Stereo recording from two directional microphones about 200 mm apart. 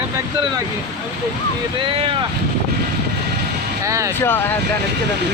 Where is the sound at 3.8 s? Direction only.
15° right (ahead or behind).